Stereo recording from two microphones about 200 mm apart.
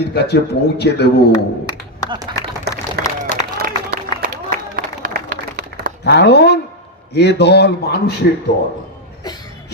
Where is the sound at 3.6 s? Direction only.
45° right (ahead or behind).